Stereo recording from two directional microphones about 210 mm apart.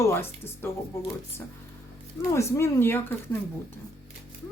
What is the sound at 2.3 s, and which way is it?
Speech, 10° left (ahead or behind).